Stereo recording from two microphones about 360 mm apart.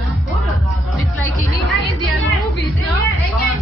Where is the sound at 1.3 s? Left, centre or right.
Centre.